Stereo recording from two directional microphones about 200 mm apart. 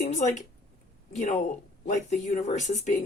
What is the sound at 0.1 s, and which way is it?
A woman's voice, 40° left (ahead or behind).